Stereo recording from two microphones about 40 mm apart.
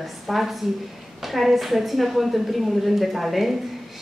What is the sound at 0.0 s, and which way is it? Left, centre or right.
A woman's voice, centre.